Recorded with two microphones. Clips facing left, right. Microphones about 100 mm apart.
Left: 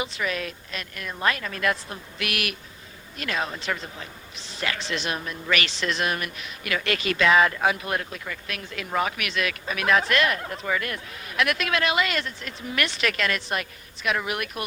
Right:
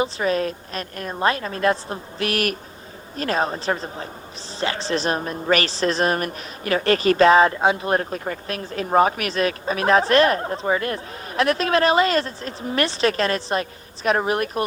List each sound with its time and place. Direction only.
0.0 s a woman's voice: 35° right (ahead or behind)